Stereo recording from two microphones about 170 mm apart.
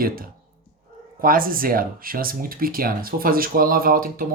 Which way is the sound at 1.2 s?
55° right (ahead or behind).